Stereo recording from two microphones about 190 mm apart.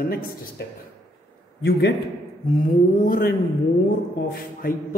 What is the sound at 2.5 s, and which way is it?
A man's voice, 50° left (ahead or behind).